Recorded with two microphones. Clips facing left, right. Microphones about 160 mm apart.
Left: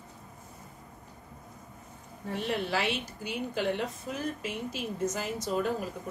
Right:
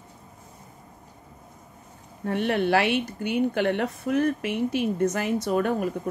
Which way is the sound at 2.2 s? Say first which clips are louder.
Right 8 dB; 65° right (ahead or behind).